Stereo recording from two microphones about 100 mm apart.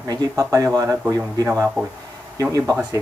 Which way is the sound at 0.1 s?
35° right (ahead or behind).